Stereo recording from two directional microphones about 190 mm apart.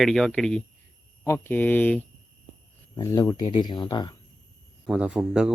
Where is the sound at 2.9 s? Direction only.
20° left (ahead or behind).